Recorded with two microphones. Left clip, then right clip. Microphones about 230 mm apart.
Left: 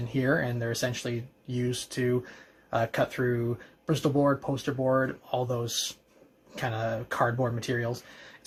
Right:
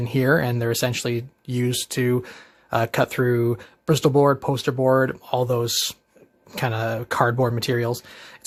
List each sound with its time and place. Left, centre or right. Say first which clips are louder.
0.0 s speech: right 7 dB; right